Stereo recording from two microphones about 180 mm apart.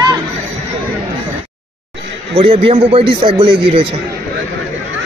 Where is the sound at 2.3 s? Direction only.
30° right (ahead or behind).